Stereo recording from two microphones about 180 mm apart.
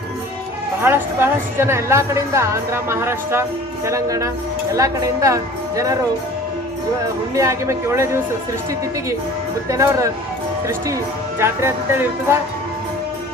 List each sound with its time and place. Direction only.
0.8 s a woman's voice: 15° right (ahead or behind)
7.3 s a woman's voice: 15° right (ahead or behind)
9.6 s a woman's voice: 15° right (ahead or behind)